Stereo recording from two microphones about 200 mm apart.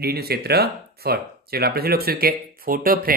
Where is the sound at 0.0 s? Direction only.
50° right (ahead or behind).